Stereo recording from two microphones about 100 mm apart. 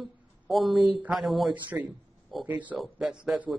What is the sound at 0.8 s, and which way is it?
Speech, 15° right (ahead or behind).